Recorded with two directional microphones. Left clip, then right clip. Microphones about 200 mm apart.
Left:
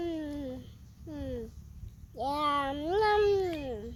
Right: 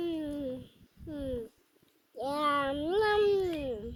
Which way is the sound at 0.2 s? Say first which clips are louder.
Right 2 dB; 20° left (ahead or behind).